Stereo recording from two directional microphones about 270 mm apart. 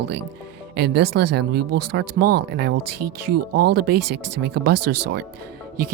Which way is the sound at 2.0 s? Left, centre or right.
Right.